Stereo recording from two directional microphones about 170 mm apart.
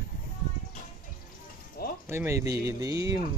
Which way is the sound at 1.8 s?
60° left (ahead or behind).